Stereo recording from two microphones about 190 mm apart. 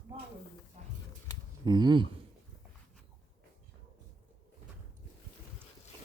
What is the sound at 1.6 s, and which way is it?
Speech, 20° right (ahead or behind).